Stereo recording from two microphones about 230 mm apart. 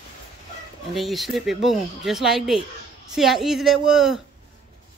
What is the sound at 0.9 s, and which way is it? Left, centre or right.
Speech, centre.